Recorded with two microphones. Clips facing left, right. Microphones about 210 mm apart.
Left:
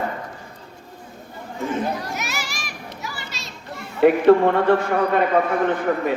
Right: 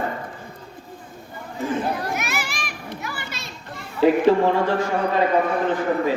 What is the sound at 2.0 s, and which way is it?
Children playing, 55° right (ahead or behind).